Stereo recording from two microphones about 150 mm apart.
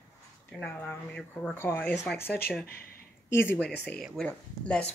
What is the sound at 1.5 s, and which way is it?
Speech, 15° left (ahead or behind).